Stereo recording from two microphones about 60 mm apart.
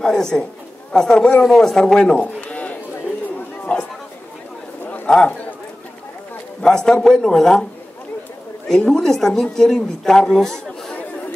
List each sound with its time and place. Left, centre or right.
0.0 s a woman's voice: centre
1.4 s a woman's voice: centre
2.4 s sheep: left
3.7 s a sound: centre
5.0 s speech: centre
6.6 s a woman's voice: centre
8.6 s a woman's voice: centre